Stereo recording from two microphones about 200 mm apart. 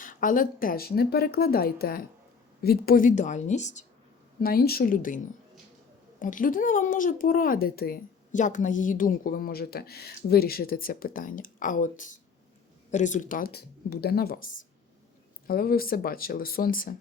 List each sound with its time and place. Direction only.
0.0 s speech: 40° left (ahead or behind)
4.4 s speech: 50° left (ahead or behind)